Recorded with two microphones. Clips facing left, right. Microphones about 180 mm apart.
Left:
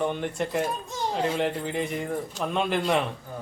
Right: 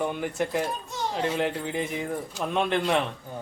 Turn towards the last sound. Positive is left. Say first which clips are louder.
# even
turn(degrees=0)  # may be behind; listen again after turning